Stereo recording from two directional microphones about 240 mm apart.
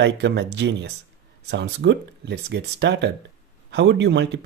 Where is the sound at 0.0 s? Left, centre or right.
Right.